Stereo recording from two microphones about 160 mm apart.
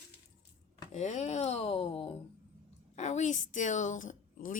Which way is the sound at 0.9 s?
45° left (ahead or behind).